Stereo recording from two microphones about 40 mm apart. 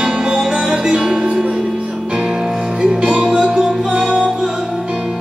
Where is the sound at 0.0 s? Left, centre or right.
Centre.